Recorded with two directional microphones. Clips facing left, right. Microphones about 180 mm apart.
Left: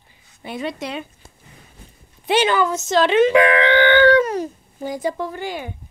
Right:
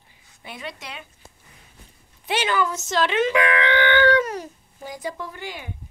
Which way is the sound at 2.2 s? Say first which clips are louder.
Left 6 dB; 25° left (ahead or behind).